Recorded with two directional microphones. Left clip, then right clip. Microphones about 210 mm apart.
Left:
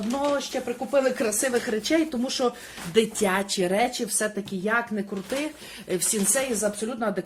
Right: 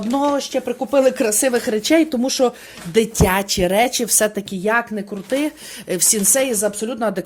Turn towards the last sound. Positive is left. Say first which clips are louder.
# right 6 dB
turn(degrees=-45)  # may be behind; listen again after turning